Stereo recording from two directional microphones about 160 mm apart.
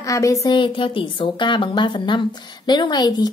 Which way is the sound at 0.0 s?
20° left (ahead or behind).